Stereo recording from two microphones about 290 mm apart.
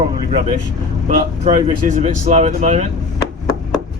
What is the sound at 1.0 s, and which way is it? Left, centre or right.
Speech, right.